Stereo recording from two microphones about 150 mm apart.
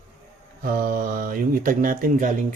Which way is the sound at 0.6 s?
75° right (ahead or behind).